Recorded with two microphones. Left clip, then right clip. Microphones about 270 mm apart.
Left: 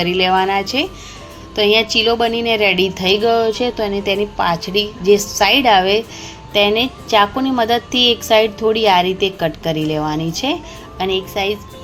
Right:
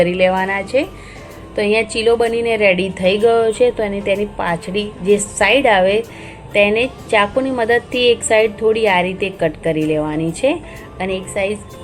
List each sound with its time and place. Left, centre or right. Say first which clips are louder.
0.0 s a woman's voice: even; left